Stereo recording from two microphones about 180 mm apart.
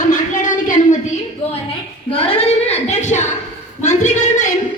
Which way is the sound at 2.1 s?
35° left (ahead or behind).